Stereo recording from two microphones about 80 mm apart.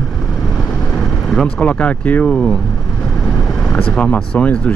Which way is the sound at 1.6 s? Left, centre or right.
Centre.